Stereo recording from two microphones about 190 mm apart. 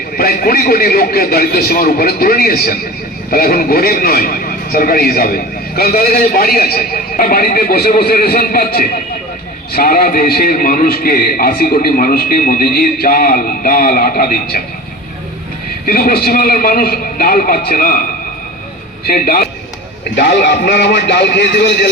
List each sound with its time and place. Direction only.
0.2 s a man's voice: 50° left (ahead or behind)
15.9 s a man's voice: 50° left (ahead or behind)
19.0 s a man's voice: 50° left (ahead or behind)